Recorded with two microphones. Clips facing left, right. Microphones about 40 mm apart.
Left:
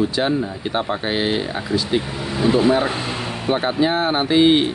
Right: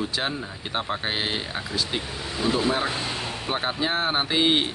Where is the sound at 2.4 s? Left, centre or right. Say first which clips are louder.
Left 8 dB; centre.